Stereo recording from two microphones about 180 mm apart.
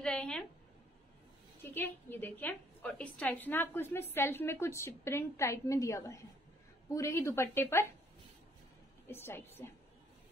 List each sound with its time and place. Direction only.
0.0 s a sound: 5° left (ahead or behind)
1.6 s a woman's voice: 10° left (ahead or behind)
9.0 s a woman's voice: 15° left (ahead or behind)